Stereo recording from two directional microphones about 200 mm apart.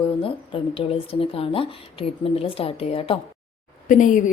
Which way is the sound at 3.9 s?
40° left (ahead or behind).